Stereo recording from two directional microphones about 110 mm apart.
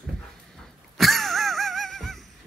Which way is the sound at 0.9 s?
Centre (ahead or behind).